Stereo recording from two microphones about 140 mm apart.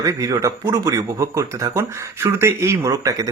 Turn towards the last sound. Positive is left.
turn(degrees=-25)  # may be behind; listen again after turning